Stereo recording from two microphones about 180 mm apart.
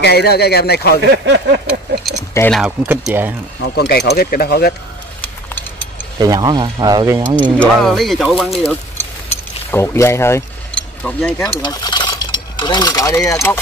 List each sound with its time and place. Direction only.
0.0 s speech: 65° left (ahead or behind)
1.0 s speech: 75° right (ahead or behind)
1.7 s a sound: centre (ahead or behind)
2.5 s speech: 5° right (ahead or behind)
3.6 s speech: 65° left (ahead or behind)
6.1 s speech: 20° right (ahead or behind)
7.5 s speech: 5° left (ahead or behind)
9.7 s speech: 15° left (ahead or behind)
11.6 s cutlery: 20° left (ahead or behind)